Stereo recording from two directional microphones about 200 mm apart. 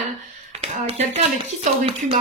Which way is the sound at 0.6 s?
30° right (ahead or behind).